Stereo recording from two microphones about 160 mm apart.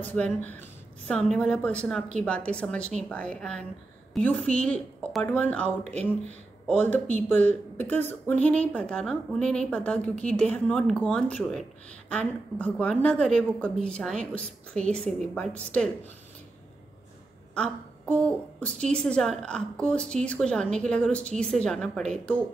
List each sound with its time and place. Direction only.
0.0 s a woman's voice: 10° left (ahead or behind)
5.9 s speech: 45° right (ahead or behind)
6.7 s a woman's voice: 10° left (ahead or behind)
17.6 s a woman's voice: 10° left (ahead or behind)